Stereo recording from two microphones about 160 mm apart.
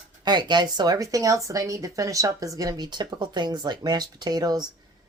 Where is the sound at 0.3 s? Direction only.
25° right (ahead or behind).